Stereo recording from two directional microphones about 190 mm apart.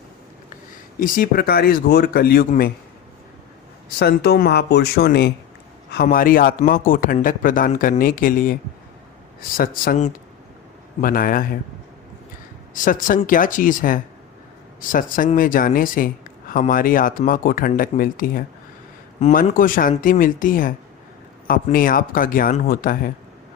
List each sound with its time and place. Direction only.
0.9 s a man's voice: 45° left (ahead or behind)
3.9 s a man's voice: 55° left (ahead or behind)
9.6 s a man's voice: 50° left (ahead or behind)
12.7 s a man's voice: 45° left (ahead or behind)